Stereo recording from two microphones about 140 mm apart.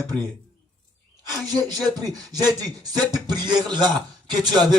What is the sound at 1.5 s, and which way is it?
Speech, 30° right (ahead or behind).